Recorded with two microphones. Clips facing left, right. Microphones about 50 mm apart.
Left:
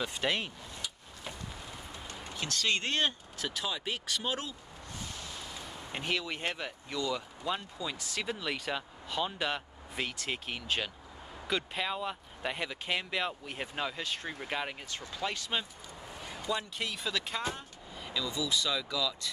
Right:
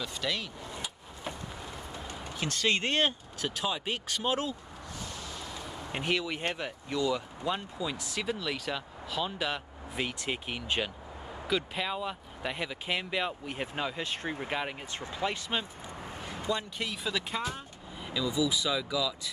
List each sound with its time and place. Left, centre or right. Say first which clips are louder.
0.0 s speech: left 2 dB; left
2.1 s a sound: right 2 dB; centre
2.4 s speech: right 3 dB; centre
5.6 s speech: right 4 dB; centre
14.0 s speech: right 3 dB; right
14.5 s speech: even; centre
14.9 s speech: right 3 dB; right
16.4 s speech: right 1 dB; centre